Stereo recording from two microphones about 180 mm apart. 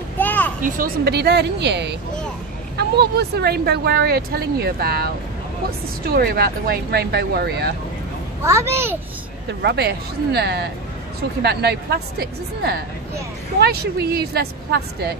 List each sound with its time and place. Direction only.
0.2 s a sound: 10° left (ahead or behind)
0.7 s speech: 50° right (ahead or behind); by 2.0 s 70° right (ahead or behind)
3.0 s speech: 65° right (ahead or behind)
8.5 s a child's voice: 15° right (ahead or behind)
9.5 s speech: 65° right (ahead or behind)